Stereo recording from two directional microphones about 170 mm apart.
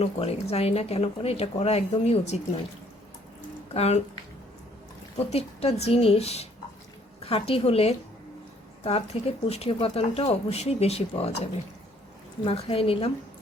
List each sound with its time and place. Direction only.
0.0 s speech: 35° left (ahead or behind)
3.8 s speech: 40° left (ahead or behind)
5.2 s speech: 35° left (ahead or behind)
12.5 s speech: 35° left (ahead or behind)